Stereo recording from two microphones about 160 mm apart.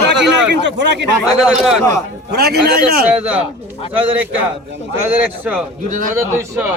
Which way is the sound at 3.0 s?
5° right (ahead or behind).